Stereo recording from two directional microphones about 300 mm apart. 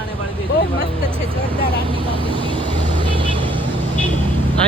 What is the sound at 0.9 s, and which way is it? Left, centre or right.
Vehicle, centre.